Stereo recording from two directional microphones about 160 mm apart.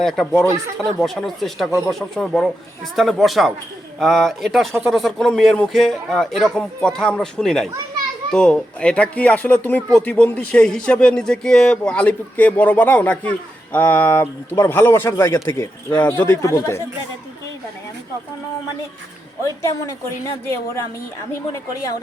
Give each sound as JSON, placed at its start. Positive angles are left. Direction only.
{"t": 0.0, "sound": "a man's voice", "side_deg": 0}
{"t": 19.6, "sound": "a woman's voice", "side_deg": 20}